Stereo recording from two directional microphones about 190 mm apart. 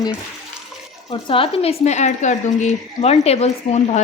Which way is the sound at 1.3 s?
30° left (ahead or behind).